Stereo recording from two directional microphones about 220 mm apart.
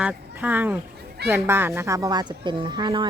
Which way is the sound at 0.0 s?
5° right (ahead or behind).